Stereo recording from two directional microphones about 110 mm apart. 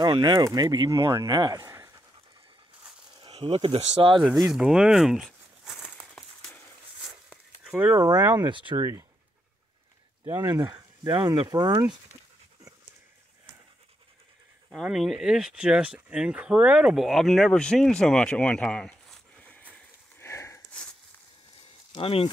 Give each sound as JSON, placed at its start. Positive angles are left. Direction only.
{"t": 0.0, "sound": "speech", "side_deg": -40}
{"t": 3.3, "sound": "speech", "side_deg": -65}
{"t": 4.2, "sound": "speech", "side_deg": 0}
{"t": 5.7, "sound": "a sound", "side_deg": 0}
{"t": 7.7, "sound": "speech", "side_deg": -15}
{"t": 8.4, "sound": "speech", "side_deg": -45}
{"t": 8.7, "sound": "speech", "side_deg": -30}
{"t": 10.2, "sound": "speech", "side_deg": -30}
{"t": 14.7, "sound": "speech", "side_deg": -5}
{"t": 19.7, "sound": "a sound", "side_deg": 25}
{"t": 21.9, "sound": "speech", "side_deg": 60}